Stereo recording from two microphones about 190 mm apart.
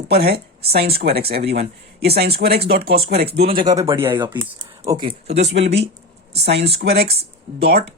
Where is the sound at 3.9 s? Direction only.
10° right (ahead or behind).